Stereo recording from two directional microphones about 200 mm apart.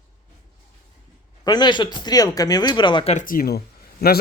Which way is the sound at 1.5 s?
20° left (ahead or behind).